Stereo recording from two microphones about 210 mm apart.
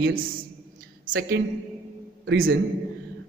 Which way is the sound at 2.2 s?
55° right (ahead or behind).